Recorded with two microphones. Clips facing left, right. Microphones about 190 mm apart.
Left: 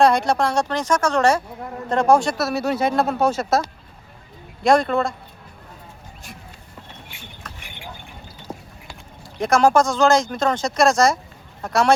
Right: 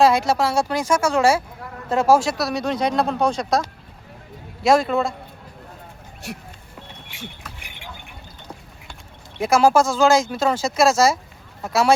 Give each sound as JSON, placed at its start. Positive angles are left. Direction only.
{"t": 0.0, "sound": "speech", "side_deg": -5}
{"t": 6.2, "sound": "speech", "side_deg": -75}
{"t": 9.4, "sound": "speech", "side_deg": -5}